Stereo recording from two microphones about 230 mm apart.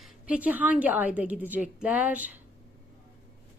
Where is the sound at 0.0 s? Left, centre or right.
Centre.